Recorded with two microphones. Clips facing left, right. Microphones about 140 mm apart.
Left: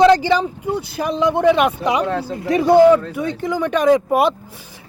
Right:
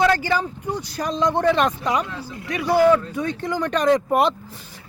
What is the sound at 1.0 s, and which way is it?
Speech, 10° left (ahead or behind).